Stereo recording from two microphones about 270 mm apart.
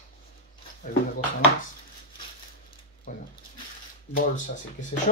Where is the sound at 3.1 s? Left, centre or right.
Left.